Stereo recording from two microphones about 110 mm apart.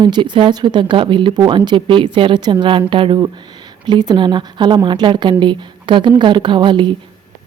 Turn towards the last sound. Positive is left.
turn(degrees=-45)  # may be behind; listen again after turning